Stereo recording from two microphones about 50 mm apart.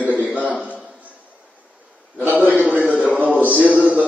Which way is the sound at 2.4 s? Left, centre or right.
Left.